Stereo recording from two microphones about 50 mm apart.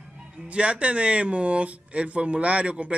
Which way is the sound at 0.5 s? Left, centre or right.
Right.